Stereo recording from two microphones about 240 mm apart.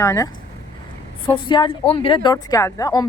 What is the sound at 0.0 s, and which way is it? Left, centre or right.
Speech, centre.